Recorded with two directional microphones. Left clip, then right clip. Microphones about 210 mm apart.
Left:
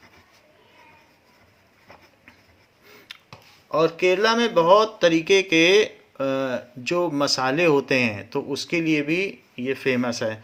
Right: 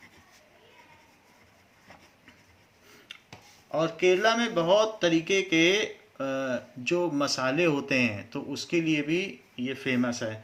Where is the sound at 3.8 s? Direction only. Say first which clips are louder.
Left 4 dB; 45° left (ahead or behind).